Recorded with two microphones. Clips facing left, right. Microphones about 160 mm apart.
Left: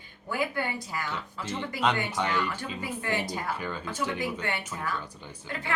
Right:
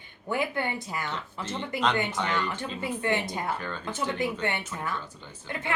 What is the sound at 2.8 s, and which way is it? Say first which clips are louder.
Speech: right 4 dB; 25° right (ahead or behind).